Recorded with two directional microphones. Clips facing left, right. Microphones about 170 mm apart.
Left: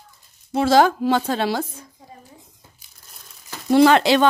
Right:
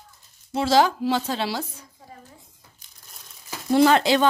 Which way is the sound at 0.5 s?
55° left (ahead or behind).